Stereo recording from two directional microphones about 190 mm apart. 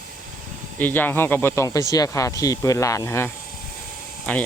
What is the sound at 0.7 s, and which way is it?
Speech, 10° left (ahead or behind).